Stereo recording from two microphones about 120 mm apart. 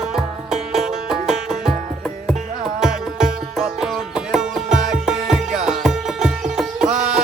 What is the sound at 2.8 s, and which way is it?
Music, 5° right (ahead or behind).